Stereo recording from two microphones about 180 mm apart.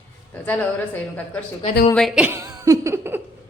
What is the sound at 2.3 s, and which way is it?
Laughter, 15° right (ahead or behind).